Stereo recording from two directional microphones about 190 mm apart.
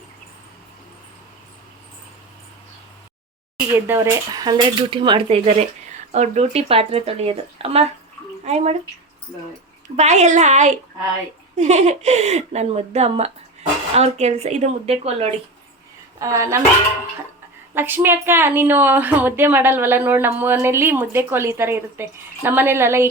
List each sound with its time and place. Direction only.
3.8 s speech: 10° right (ahead or behind); by 8.8 s 35° right (ahead or behind)
9.9 s speech: 35° right (ahead or behind)
16.2 s a woman's voice: 15° right (ahead or behind)
17.7 s a woman's voice: 10° right (ahead or behind)